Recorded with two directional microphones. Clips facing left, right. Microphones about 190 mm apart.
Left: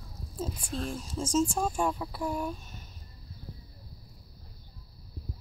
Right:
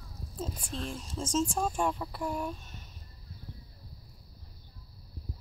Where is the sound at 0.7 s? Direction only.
40° left (ahead or behind).